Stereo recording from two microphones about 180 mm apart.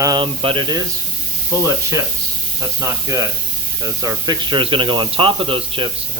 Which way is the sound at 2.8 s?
20° right (ahead or behind).